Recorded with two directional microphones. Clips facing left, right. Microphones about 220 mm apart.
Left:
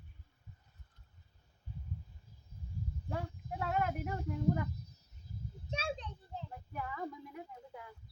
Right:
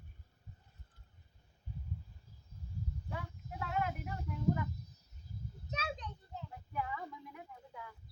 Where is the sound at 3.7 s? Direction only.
40° left (ahead or behind).